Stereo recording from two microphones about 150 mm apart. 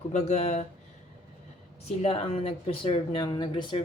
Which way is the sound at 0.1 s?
50° left (ahead or behind).